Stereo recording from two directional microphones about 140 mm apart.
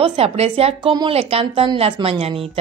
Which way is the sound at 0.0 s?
45° right (ahead or behind).